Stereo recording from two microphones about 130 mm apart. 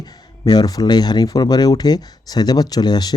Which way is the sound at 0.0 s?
30° left (ahead or behind).